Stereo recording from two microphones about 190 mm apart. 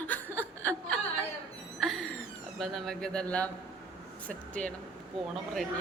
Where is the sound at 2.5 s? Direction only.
Centre (ahead or behind).